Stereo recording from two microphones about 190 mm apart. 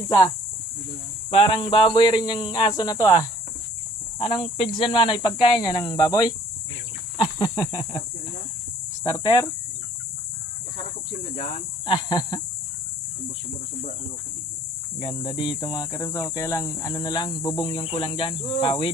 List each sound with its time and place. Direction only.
1.3 s speech: 30° left (ahead or behind)
4.2 s speech: 25° left (ahead or behind)
9.0 s speech: 20° left (ahead or behind)
11.8 s speech: 25° left (ahead or behind)
15.0 s speech: 30° left (ahead or behind)